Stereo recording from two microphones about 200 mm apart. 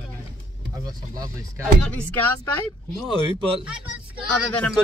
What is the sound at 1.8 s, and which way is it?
Speech, 5° left (ahead or behind).